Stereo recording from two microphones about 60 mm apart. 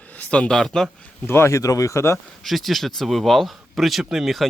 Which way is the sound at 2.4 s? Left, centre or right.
Centre.